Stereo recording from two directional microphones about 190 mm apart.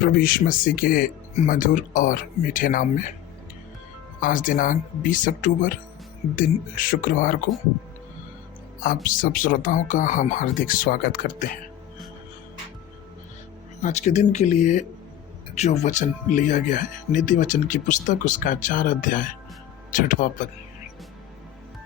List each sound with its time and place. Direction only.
0.0 s speech: 50° left (ahead or behind)
4.2 s speech: 45° left (ahead or behind)
9.0 s speech: 45° left (ahead or behind)
13.8 s speech: 35° left (ahead or behind)